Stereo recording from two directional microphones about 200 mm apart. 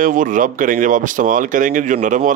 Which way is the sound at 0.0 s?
40° right (ahead or behind).